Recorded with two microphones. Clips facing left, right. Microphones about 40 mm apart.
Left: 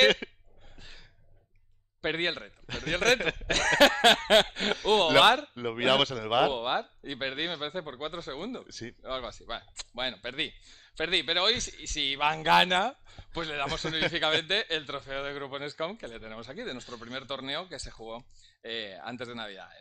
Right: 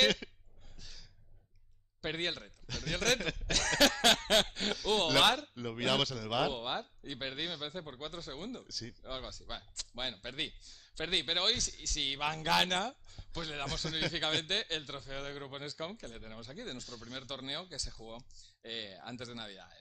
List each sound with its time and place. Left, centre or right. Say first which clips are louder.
0.0 s a sound: left 7 dB; centre
0.7 s gasp: left 4 dB; left
2.0 s a man's voice: left 7 dB; left
3.7 s speech: left 7 dB; left
4.5 s speech: left 7 dB; centre
5.5 s speech: left 7 dB; left
7.3 s speech: left 6 dB; left
7.8 s speech: left 7 dB; left
11.3 s speech: left 6 dB; centre
14.0 s speech: left 7 dB; left